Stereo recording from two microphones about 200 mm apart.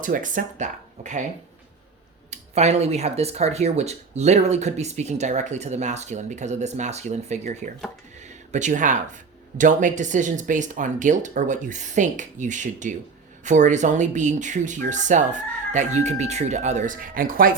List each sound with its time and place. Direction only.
0.0 s speech: 40° right (ahead or behind)
2.3 s speech: 35° right (ahead or behind)